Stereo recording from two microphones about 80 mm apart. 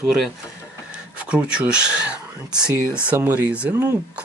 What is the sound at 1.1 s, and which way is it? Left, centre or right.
Speech, centre.